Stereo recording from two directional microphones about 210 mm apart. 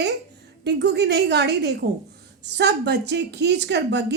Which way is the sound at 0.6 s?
55° right (ahead or behind).